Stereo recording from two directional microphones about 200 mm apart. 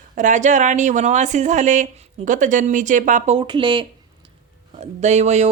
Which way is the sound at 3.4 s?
25° right (ahead or behind).